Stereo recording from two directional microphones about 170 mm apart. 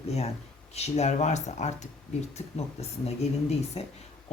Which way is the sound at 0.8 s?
40° left (ahead or behind).